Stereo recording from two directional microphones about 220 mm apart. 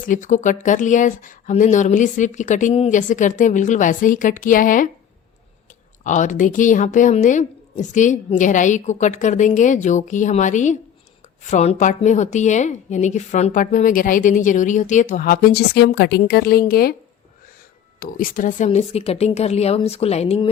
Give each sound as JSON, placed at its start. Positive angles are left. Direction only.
{"t": 0.0, "sound": "a woman's voice", "side_deg": 35}
{"t": 6.0, "sound": "a woman's voice", "side_deg": 35}
{"t": 18.0, "sound": "speech", "side_deg": 40}